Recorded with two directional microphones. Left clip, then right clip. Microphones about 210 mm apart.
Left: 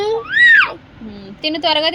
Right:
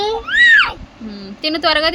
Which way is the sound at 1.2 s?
10° right (ahead or behind).